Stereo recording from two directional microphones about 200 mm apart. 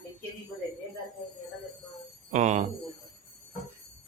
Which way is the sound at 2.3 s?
35° right (ahead or behind).